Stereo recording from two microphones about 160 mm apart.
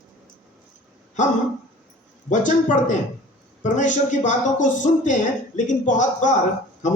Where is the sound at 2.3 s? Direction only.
50° left (ahead or behind).